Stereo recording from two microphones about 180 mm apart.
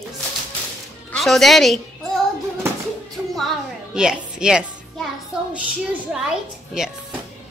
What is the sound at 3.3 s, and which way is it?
A child's voice, centre (ahead or behind).